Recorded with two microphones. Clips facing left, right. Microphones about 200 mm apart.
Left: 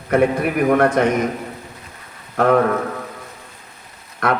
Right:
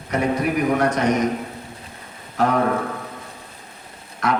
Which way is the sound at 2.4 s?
55° left (ahead or behind).